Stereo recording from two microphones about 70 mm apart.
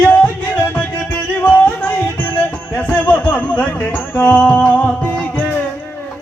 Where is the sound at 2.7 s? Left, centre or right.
Centre.